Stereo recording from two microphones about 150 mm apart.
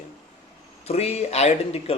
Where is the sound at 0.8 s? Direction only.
45° left (ahead or behind).